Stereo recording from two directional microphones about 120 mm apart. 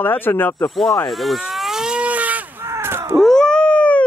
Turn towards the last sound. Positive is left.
turn(degrees=10)  # may be behind; listen again after turning